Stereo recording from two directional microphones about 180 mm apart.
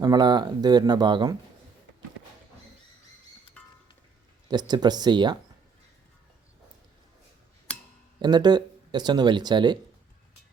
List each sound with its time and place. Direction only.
0.0 s speech: 25° right (ahead or behind)
3.6 s a sound: 5° left (ahead or behind)
4.4 s speech: 25° right (ahead or behind)
8.2 s speech: 25° right (ahead or behind)